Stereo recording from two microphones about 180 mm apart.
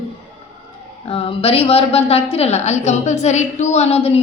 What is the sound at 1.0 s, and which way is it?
A woman's voice, 30° left (ahead or behind).